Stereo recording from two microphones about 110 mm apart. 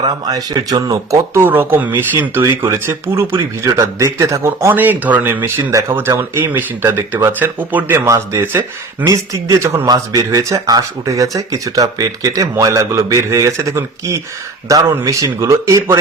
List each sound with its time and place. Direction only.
0.0 s speech: 35° right (ahead or behind); by 9.0 s 20° right (ahead or behind)
9.0 s speech: 30° right (ahead or behind)